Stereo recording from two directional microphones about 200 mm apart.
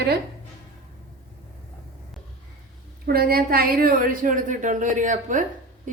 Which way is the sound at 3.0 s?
50° right (ahead or behind).